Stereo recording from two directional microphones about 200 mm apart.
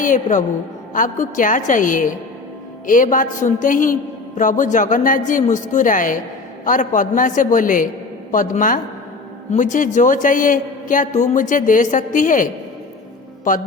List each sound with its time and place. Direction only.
0.0 s a man's voice: 40° left (ahead or behind)